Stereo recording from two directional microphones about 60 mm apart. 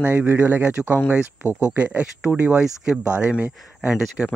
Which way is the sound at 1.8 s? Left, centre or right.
Right.